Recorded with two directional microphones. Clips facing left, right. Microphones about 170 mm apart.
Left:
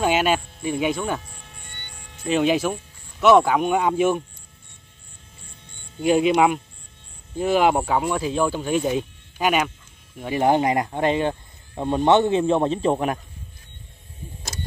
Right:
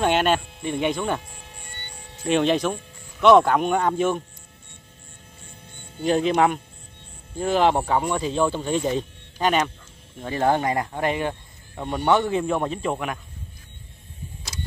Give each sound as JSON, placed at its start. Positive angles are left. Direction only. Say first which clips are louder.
{"t": 0.0, "sound": "speech", "louder": "even", "side_deg": 5}
{"t": 2.2, "sound": "speech", "louder": "even", "side_deg": 5}
{"t": 6.0, "sound": "speech", "louder": "left 2 dB", "side_deg": 10}